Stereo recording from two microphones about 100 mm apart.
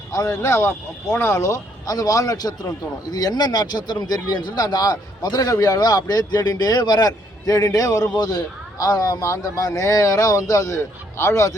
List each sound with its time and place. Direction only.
0.1 s speech: 30° left (ahead or behind)